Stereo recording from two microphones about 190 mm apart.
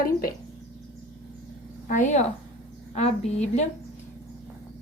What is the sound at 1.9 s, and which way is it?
A woman's voice, 40° left (ahead or behind).